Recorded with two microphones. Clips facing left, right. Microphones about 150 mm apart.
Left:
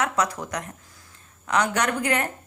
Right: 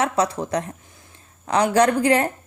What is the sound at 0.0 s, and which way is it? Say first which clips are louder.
A woman's voice: right 4 dB; 30° right (ahead or behind).